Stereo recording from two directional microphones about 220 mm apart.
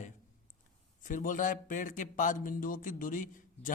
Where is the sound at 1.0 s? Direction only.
40° left (ahead or behind).